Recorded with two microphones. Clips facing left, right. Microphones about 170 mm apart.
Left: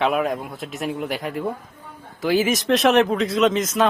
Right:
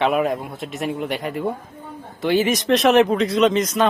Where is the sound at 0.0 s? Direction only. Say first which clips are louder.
Right 2 dB; centre (ahead or behind).